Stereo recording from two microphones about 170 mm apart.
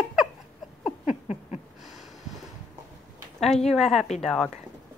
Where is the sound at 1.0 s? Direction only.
40° left (ahead or behind).